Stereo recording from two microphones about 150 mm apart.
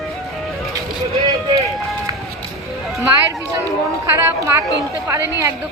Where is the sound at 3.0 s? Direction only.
20° right (ahead or behind).